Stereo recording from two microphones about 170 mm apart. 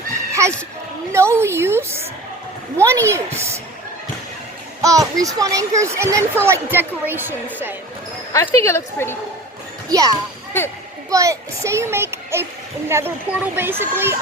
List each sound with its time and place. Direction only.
0.4 s a sound: 15° right (ahead or behind)
2.8 s speech: 15° right (ahead or behind)
4.8 s a child's voice: 20° right (ahead or behind)
8.3 s speech: 15° left (ahead or behind)
9.9 s a child's voice: 20° right (ahead or behind)